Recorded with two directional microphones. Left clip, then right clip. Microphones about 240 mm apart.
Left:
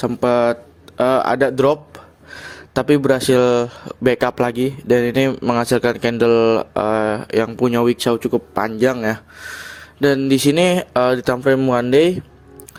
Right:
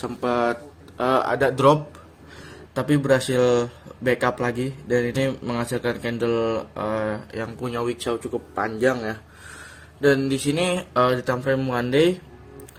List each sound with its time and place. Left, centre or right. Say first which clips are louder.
0.0 s speech: left 7 dB; left